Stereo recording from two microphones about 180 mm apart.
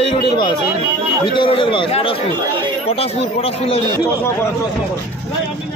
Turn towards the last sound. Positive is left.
turn(degrees=35)  # may be behind; listen again after turning